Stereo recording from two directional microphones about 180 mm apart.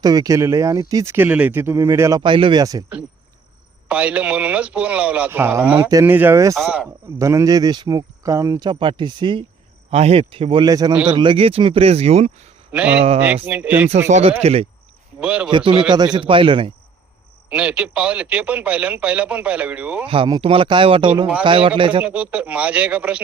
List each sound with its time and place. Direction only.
0.0 s speech: 20° right (ahead or behind)
3.8 s a man's voice: 5° right (ahead or behind)
7.2 s speech: 15° right (ahead or behind); by 12.5 s 35° right (ahead or behind)
12.7 s a man's voice: 5° right (ahead or behind)
13.0 s speech: 35° right (ahead or behind)
13.2 s a man's voice: 10° right (ahead or behind)
14.1 s speech: 35° right (ahead or behind)
15.2 s a man's voice: 5° right (ahead or behind)
15.4 s speech: 30° right (ahead or behind)
17.5 s a man's voice: 5° right (ahead or behind)
20.1 s speech: 25° right (ahead or behind)
22.0 s a man's voice: 5° right (ahead or behind)